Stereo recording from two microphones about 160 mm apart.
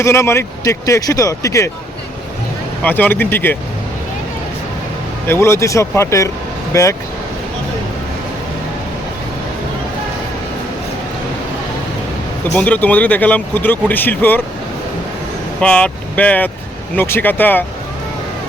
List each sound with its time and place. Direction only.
0.0 s speech: 15° left (ahead or behind)
2.8 s speech: 10° left (ahead or behind)
5.3 s speech: 15° left (ahead or behind)
12.5 s speech: 10° left (ahead or behind)
15.6 s speech: 5° left (ahead or behind)